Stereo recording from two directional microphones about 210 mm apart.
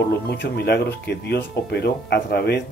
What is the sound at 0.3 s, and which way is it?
Speech, 50° left (ahead or behind).